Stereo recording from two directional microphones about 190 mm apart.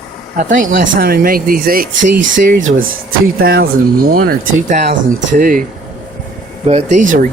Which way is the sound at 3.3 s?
50° right (ahead or behind).